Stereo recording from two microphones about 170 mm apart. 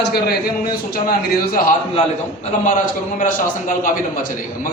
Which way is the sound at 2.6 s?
50° left (ahead or behind).